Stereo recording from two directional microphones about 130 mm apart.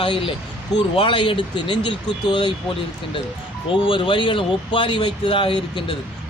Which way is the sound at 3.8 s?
40° left (ahead or behind).